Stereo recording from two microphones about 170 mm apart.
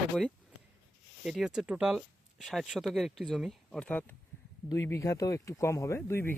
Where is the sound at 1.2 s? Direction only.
5° right (ahead or behind).